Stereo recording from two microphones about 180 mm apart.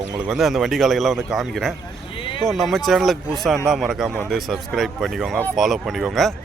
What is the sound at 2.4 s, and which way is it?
Speech, centre (ahead or behind).